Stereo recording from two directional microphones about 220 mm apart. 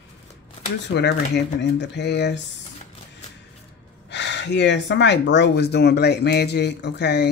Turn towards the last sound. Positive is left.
turn(degrees=50)  # may be behind; listen again after turning